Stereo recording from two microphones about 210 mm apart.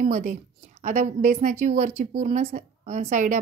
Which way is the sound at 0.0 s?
40° right (ahead or behind).